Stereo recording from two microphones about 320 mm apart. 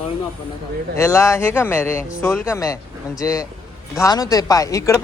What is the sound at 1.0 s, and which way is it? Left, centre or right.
Speech, centre.